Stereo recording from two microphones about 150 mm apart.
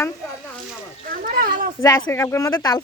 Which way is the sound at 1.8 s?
20° left (ahead or behind).